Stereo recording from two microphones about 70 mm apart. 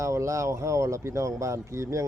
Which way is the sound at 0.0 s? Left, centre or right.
Right.